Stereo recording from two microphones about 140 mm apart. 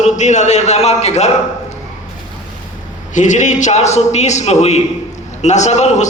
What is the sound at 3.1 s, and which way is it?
A man's voice, 60° left (ahead or behind).